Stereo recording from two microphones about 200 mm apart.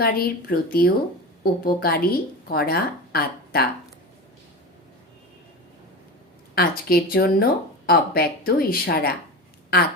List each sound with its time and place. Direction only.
0.0 s speech: 50° left (ahead or behind)
6.5 s speech: 50° left (ahead or behind)